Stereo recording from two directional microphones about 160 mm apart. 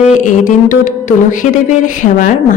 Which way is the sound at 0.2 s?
55° left (ahead or behind).